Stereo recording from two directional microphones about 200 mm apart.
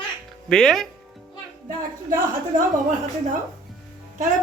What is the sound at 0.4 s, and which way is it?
Speech, 5° left (ahead or behind).